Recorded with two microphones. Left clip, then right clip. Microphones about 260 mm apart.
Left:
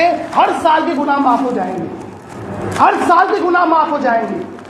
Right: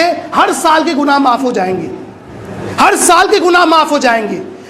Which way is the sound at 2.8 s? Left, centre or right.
Right.